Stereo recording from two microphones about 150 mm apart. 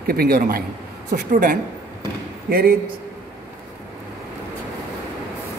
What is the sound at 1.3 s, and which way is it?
Speech, 60° right (ahead or behind).